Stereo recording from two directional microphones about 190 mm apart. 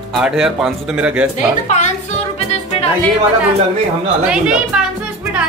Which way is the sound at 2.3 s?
35° left (ahead or behind).